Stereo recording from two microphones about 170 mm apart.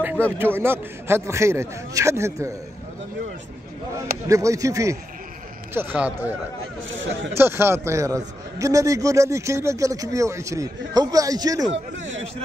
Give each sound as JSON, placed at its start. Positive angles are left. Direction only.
{"t": 0.4, "sound": "a man's voice", "side_deg": -15}
{"t": 4.3, "sound": "a man's voice", "side_deg": -20}
{"t": 7.3, "sound": "a man's voice", "side_deg": -15}
{"t": 11.7, "sound": "speech", "side_deg": -35}